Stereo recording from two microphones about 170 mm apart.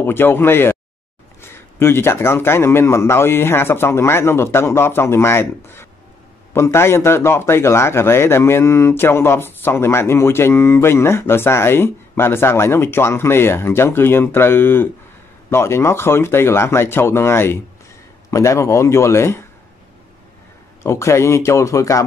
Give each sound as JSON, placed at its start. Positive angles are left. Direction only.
{"t": 0.0, "sound": "a man's voice", "side_deg": 15}
{"t": 20.8, "sound": "a man's voice", "side_deg": 15}